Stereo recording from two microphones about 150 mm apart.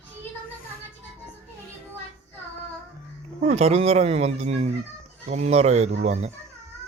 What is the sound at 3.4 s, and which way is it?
Speech, 45° right (ahead or behind).